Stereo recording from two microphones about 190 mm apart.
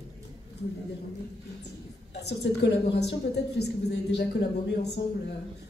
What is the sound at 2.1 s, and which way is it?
A woman's voice, 60° left (ahead or behind).